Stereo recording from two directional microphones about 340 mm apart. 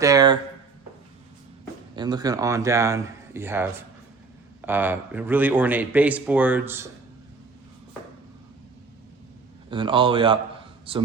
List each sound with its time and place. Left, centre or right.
0.0 s speech: centre
2.0 s speech: centre
9.6 s speech: centre